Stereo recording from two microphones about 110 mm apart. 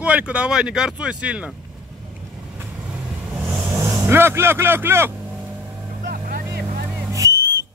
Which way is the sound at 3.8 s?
25° right (ahead or behind).